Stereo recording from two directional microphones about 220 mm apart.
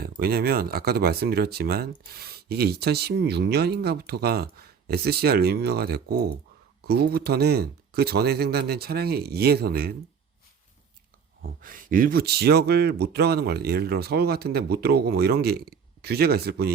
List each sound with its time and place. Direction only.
0.2 s speech: 45° right (ahead or behind)
11.6 s speech: 40° right (ahead or behind)